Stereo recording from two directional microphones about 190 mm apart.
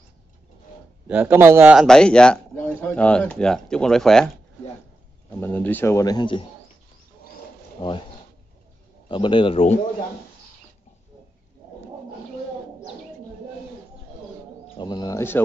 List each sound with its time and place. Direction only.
1.0 s a man's voice: 10° right (ahead or behind)
5.4 s speech: 10° left (ahead or behind)
7.8 s a man's voice: 25° left (ahead or behind)
9.1 s a man's voice: 25° left (ahead or behind)
14.8 s a man's voice: 20° left (ahead or behind)